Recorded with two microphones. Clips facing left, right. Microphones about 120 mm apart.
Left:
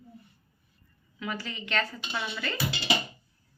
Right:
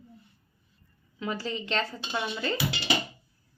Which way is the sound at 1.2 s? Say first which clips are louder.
Right 4 dB; 30° right (ahead or behind).